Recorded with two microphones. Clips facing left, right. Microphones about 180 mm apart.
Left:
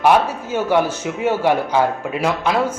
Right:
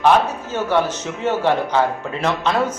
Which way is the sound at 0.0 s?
10° left (ahead or behind).